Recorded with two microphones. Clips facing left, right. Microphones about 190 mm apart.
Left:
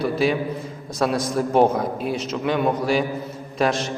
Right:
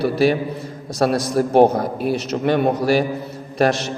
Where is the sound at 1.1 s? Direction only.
70° right (ahead or behind).